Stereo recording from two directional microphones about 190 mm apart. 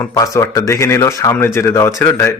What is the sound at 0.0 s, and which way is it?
Speech, 20° left (ahead or behind).